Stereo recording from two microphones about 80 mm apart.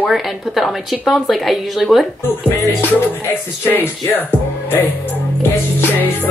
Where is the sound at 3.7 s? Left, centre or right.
Left.